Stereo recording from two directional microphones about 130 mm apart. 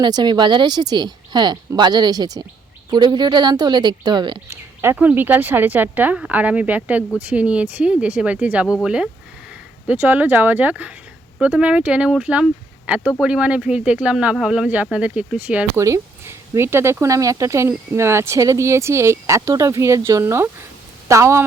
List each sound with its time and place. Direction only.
0.0 s speech: 35° right (ahead or behind)
4.4 s speech: 15° right (ahead or behind)